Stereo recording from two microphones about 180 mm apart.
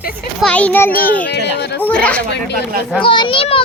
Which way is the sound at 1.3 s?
70° left (ahead or behind).